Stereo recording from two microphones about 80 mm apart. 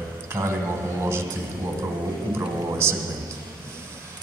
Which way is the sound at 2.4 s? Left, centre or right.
Right.